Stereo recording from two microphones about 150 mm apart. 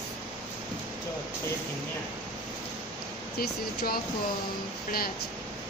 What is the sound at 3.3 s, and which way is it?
Speech, 85° left.